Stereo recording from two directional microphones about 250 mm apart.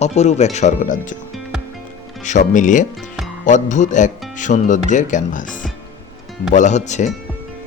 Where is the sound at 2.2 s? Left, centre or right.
Left.